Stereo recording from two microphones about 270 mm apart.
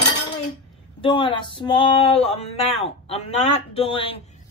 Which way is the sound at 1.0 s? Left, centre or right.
Centre.